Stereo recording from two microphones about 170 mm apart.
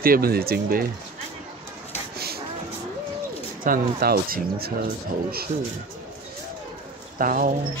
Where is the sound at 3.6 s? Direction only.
60° right (ahead or behind).